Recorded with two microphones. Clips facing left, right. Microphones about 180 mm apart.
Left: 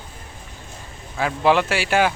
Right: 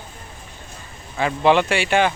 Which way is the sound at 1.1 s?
5° left (ahead or behind).